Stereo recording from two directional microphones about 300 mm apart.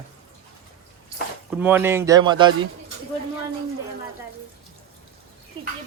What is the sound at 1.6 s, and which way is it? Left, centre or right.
Speech, centre.